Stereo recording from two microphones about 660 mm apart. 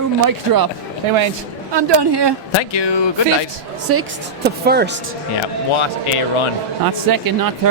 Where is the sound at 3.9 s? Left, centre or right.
Right.